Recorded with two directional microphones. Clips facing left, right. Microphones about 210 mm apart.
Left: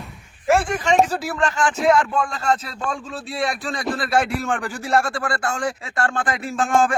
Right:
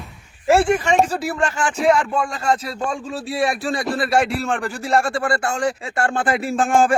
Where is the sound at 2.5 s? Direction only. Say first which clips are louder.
Right 2 dB; 10° right (ahead or behind).